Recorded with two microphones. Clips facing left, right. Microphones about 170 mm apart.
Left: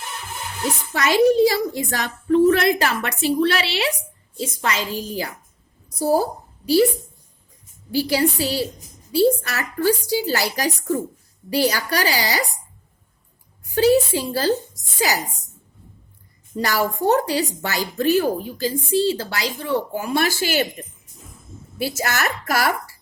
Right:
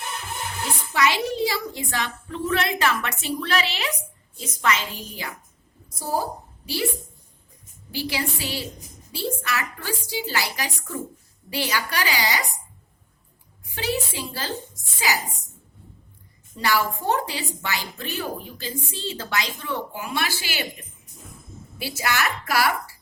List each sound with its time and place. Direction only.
0.9 s speech: 45° left (ahead or behind)
7.9 s speech: 40° left (ahead or behind)
13.7 s speech: 40° left (ahead or behind)
16.6 s speech: 40° left (ahead or behind)
21.8 s a woman's voice: 45° left (ahead or behind)